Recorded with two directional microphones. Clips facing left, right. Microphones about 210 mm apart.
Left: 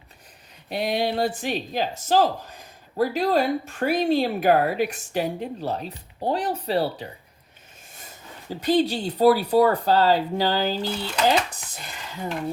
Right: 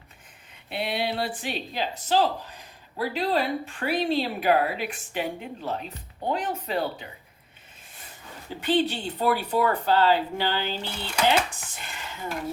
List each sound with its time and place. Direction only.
0.7 s speech: 40° left (ahead or behind)
8.4 s speech: 40° left (ahead or behind)